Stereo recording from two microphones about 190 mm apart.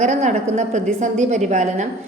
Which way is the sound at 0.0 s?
40° right (ahead or behind).